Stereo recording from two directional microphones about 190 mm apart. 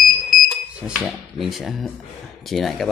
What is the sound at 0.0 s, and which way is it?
Smoke detector, centre (ahead or behind).